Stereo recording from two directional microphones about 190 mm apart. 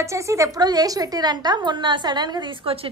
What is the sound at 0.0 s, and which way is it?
A woman's voice, 15° right (ahead or behind).